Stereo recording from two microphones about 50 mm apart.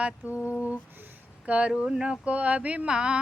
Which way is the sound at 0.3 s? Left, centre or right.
Left.